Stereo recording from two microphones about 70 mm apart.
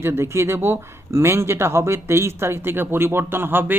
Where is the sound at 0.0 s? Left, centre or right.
Right.